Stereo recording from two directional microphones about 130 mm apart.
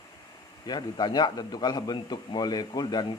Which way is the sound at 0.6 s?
35° left (ahead or behind).